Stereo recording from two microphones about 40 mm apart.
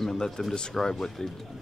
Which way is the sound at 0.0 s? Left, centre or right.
Centre.